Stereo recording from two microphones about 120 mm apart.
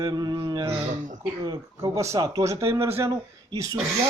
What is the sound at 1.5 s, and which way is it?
Speech, 25° right (ahead or behind).